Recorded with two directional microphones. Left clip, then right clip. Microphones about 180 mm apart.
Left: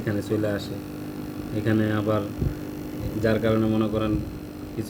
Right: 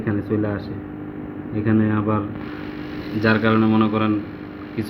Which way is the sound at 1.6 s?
5° right (ahead or behind).